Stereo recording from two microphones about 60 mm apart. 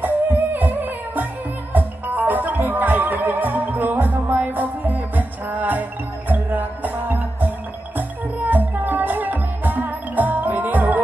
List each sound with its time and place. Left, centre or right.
0.0 s music: right